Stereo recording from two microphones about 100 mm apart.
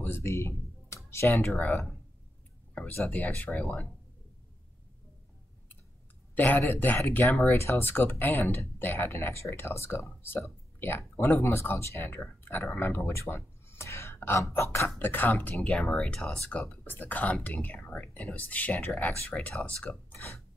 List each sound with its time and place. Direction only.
0.0 s a sound: 25° left (ahead or behind)
1.4 s speech: 10° left (ahead or behind)
3.1 s speech: 15° left (ahead or behind)
6.3 s speech: 15° left (ahead or behind)
15.5 s speech: 5° left (ahead or behind)